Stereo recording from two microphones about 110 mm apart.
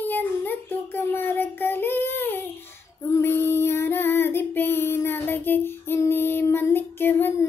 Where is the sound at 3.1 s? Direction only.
20° left (ahead or behind).